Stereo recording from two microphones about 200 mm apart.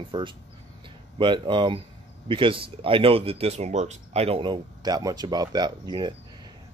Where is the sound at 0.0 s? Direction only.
25° right (ahead or behind).